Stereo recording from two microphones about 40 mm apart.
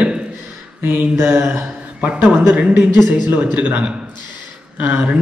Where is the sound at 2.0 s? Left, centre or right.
Right.